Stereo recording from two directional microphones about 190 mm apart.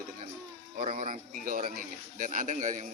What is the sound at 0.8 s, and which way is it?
A man's voice, 40° right (ahead or behind).